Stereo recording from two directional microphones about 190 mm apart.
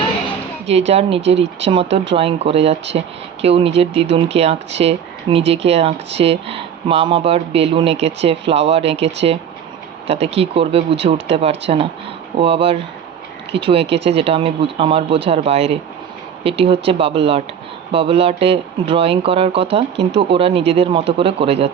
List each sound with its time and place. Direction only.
0.9 s speech: 35° right (ahead or behind)
13.8 s speech: 70° right (ahead or behind)
14.2 s speech: 30° right (ahead or behind)